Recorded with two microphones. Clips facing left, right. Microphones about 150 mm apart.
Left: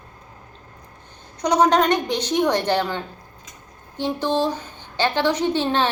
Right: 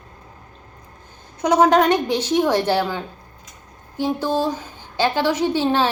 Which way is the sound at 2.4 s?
10° right (ahead or behind).